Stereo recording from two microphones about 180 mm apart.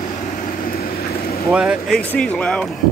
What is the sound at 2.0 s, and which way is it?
Speech, 5° left (ahead or behind).